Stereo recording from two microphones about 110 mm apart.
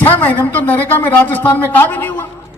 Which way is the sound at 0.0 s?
15° left (ahead or behind).